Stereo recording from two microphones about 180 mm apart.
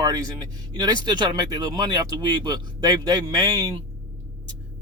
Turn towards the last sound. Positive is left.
turn(degrees=-20)  # may be behind; listen again after turning